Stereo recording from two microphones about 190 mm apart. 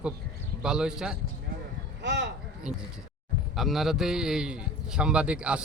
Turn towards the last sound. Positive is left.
turn(degrees=-5)  # may be behind; listen again after turning